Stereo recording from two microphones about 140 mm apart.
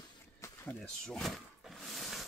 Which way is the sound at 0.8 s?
5° left (ahead or behind).